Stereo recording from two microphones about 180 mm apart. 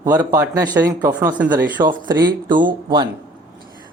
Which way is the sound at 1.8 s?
25° right (ahead or behind).